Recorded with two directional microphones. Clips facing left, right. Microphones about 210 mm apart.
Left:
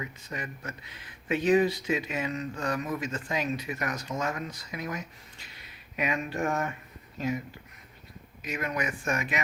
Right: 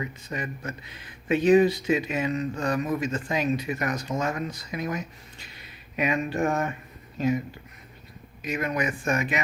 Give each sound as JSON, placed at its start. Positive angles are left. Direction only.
{"t": 0.0, "sound": "speech", "side_deg": -30}
{"t": 8.4, "sound": "speech", "side_deg": -25}